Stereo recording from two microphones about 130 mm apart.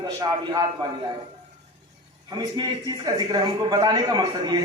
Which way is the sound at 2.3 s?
35° right (ahead or behind).